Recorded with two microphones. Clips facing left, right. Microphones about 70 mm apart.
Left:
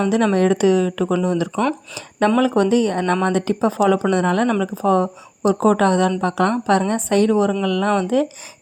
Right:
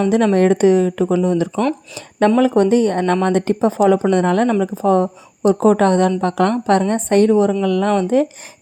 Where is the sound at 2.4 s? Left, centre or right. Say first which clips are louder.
Right 3 dB; right.